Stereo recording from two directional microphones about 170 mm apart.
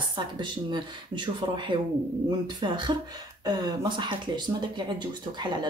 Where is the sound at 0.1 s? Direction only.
30° right (ahead or behind).